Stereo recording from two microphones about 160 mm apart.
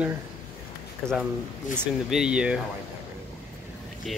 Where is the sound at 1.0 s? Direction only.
5° left (ahead or behind).